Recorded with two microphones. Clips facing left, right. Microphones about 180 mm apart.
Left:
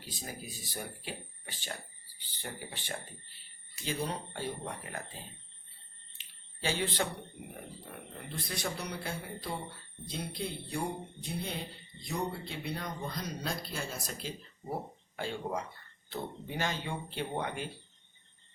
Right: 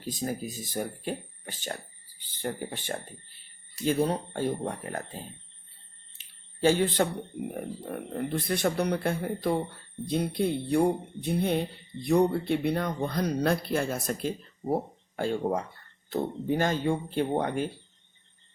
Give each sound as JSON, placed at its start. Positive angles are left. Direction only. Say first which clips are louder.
{"t": 0.0, "sound": "speech", "louder": "right 12 dB", "side_deg": -45}
{"t": 6.1, "sound": "speech", "louder": "right 14 dB", "side_deg": -45}